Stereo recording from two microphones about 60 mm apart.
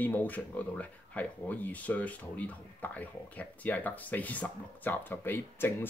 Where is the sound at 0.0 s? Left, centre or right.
Left.